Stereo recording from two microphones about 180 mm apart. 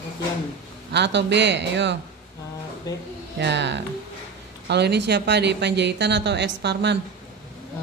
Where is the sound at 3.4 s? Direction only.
75° right (ahead or behind).